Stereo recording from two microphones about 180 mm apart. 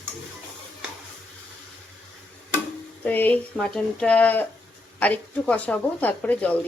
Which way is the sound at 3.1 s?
10° left (ahead or behind).